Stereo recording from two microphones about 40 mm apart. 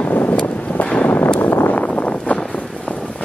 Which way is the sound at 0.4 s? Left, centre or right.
Left.